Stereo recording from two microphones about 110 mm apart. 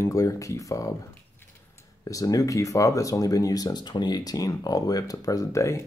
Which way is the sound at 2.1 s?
30° left (ahead or behind).